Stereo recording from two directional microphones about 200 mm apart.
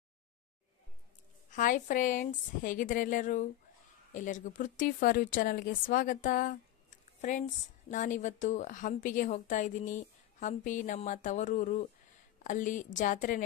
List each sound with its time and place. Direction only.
1.5 s a woman's voice: 40° left (ahead or behind)